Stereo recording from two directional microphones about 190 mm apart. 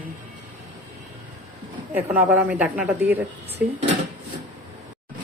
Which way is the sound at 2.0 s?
5° right (ahead or behind).